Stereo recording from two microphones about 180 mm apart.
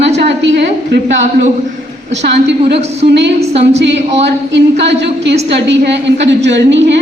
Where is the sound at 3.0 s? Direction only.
70° right (ahead or behind).